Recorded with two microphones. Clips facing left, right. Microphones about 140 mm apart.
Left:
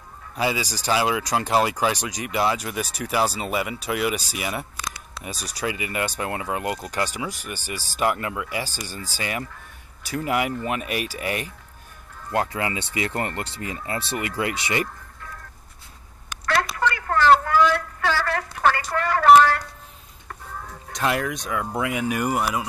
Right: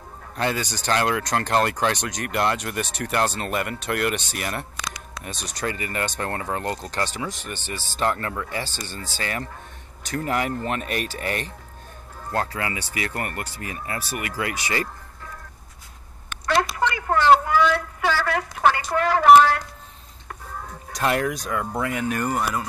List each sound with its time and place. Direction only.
0.4 s speech: 5° left (ahead or behind); by 14.9 s 25° left (ahead or behind)
16.4 s a sound: 20° right (ahead or behind)
19.2 s speech: 10° right (ahead or behind)
20.9 s speech: centre (ahead or behind)